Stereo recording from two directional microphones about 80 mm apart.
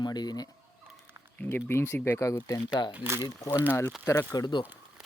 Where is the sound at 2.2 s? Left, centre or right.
Left.